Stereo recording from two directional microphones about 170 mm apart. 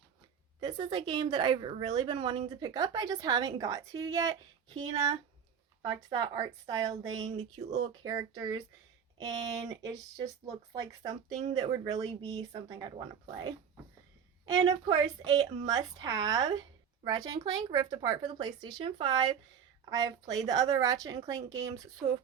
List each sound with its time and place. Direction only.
0.6 s speech: 25° right (ahead or behind)